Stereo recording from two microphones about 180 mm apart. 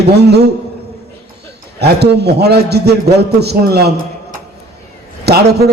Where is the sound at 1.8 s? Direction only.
65° right (ahead or behind).